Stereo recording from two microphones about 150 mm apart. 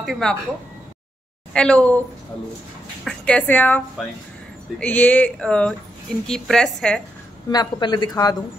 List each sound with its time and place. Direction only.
0.0 s a woman's voice: 5° left (ahead or behind)
1.5 s speech: 5° left (ahead or behind)
3.1 s a woman's voice: 10° left (ahead or behind)
7.5 s speech: 30° left (ahead or behind)